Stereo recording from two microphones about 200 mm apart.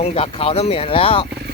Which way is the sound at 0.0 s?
30° left (ahead or behind).